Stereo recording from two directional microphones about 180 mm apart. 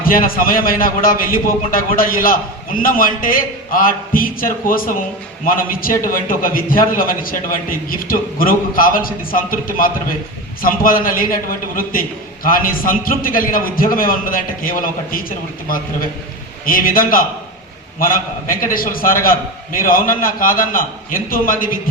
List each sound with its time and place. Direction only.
0.0 s a man's voice: 50° left (ahead or behind)